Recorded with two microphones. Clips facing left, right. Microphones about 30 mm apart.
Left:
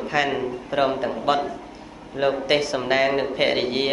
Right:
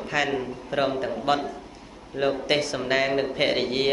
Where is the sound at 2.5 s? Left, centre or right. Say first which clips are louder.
Left 3 dB; centre.